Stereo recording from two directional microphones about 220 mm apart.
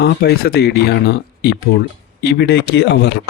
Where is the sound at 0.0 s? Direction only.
45° left (ahead or behind).